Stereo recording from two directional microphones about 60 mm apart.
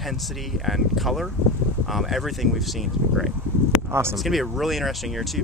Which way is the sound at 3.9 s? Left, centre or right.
Right.